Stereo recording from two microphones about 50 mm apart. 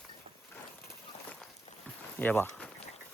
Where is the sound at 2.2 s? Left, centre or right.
Left.